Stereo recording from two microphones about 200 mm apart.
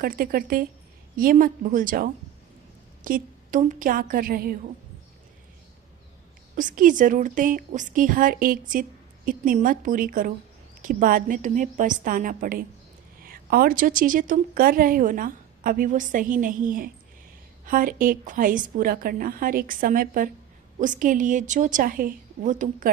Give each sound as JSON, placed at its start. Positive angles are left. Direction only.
{"t": 0.0, "sound": "speech", "side_deg": -45}
{"t": 6.6, "sound": "a woman's voice", "side_deg": -40}